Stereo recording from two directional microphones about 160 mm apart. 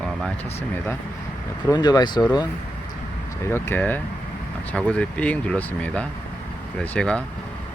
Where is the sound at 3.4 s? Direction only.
15° left (ahead or behind).